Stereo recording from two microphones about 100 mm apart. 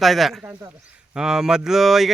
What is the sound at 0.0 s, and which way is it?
Speech, centre (ahead or behind).